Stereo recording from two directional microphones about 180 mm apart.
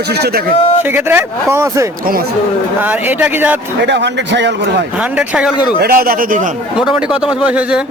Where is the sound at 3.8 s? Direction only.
75° right (ahead or behind).